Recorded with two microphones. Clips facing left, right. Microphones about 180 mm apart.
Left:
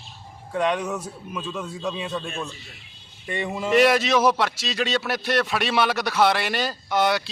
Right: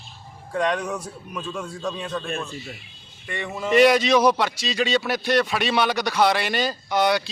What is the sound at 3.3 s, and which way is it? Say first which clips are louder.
Speech: left 2 dB; 20° left (ahead or behind).